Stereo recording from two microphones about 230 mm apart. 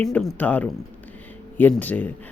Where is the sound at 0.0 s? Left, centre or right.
Centre.